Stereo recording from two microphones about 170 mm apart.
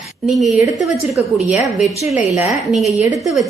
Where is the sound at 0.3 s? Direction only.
Centre (ahead or behind).